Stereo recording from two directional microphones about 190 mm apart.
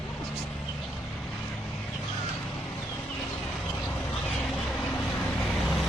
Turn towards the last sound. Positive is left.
turn(degrees=0)  # may be behind; listen again after turning